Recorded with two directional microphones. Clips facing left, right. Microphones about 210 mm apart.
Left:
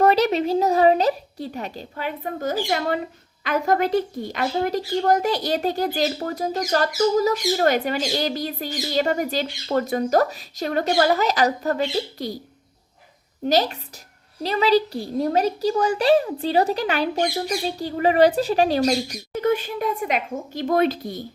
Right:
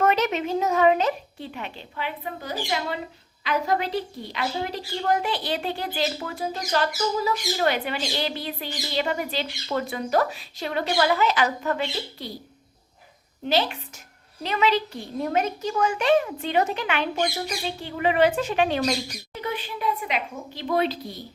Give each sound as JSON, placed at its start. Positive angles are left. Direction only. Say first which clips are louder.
{"t": 0.0, "sound": "a woman's voice", "louder": "left 5 dB", "side_deg": 35}
{"t": 13.4, "sound": "a woman's voice", "louder": "left 4 dB", "side_deg": 40}